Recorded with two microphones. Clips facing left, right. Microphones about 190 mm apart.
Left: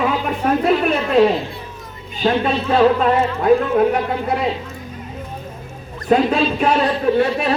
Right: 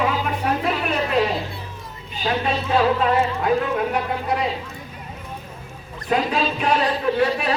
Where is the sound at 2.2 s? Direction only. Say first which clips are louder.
Left 5 dB; 45° left (ahead or behind).